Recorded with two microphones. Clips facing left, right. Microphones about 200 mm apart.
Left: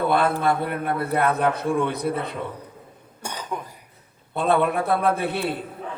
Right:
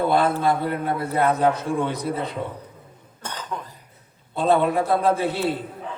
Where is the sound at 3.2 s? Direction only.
10° left (ahead or behind).